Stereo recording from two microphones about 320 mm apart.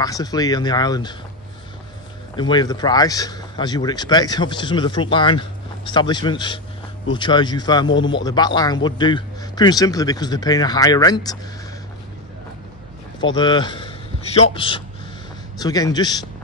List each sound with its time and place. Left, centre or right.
0.0 s speech: centre
2.3 s speech: centre
13.2 s a man's voice: centre